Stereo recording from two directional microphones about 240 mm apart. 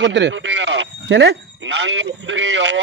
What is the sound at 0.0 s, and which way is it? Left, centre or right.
Speech, right.